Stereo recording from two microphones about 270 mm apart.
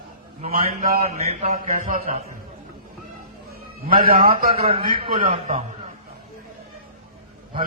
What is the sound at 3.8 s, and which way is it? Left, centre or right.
A man's voice, right.